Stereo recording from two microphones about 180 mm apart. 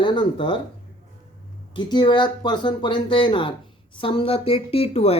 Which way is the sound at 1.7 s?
25° left (ahead or behind).